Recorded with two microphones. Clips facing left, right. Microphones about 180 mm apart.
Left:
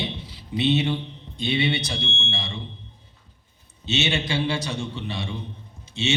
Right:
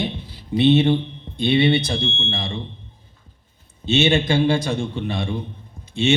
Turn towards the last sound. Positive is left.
turn(degrees=-55)  # may be behind; listen again after turning